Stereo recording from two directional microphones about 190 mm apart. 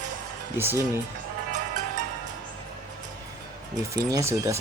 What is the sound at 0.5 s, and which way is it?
Speech, 10° right (ahead or behind).